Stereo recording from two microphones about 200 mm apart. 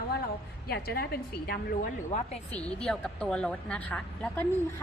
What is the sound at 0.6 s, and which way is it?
Speech, 50° left (ahead or behind).